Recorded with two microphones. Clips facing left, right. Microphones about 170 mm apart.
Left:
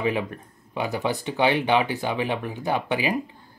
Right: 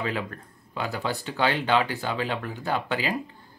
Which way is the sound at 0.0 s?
15° left (ahead or behind).